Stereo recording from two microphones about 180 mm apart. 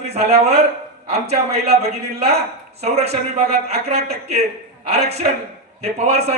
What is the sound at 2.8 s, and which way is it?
Speech, 35° right (ahead or behind).